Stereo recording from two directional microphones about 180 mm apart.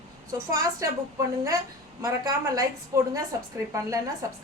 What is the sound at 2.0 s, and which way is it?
A woman's voice, 20° right (ahead or behind).